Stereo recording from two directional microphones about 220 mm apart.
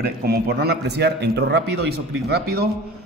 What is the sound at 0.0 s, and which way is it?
Speech, 45° right (ahead or behind).